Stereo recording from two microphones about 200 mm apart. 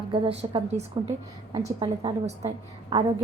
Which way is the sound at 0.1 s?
25° right (ahead or behind).